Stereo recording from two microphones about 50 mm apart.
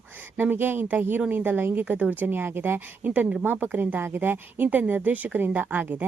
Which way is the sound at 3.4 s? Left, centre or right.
Right.